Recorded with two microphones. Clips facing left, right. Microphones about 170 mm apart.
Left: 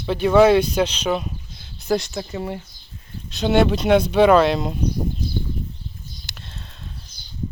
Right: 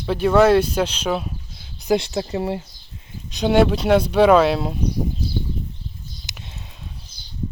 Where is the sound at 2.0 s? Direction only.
25° right (ahead or behind).